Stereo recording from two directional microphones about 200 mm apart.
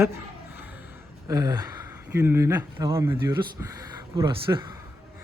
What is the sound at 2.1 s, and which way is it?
Speech, 15° right (ahead or behind).